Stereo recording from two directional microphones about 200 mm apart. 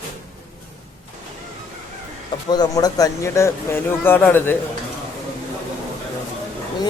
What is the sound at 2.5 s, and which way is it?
Speech, 20° left (ahead or behind).